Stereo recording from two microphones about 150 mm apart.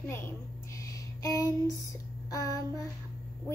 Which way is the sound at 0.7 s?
20° left (ahead or behind).